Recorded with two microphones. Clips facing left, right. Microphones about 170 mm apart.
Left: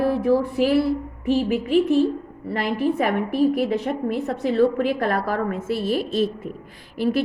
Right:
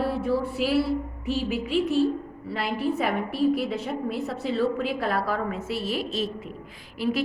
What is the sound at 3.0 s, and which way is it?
A woman's voice, 60° left (ahead or behind).